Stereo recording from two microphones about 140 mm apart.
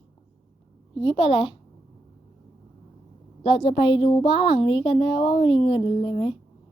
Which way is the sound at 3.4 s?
35° left (ahead or behind).